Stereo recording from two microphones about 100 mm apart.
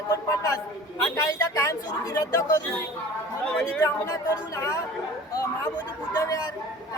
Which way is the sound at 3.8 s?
30° left (ahead or behind).